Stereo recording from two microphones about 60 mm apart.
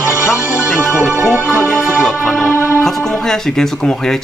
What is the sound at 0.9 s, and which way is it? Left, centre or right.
Music, centre.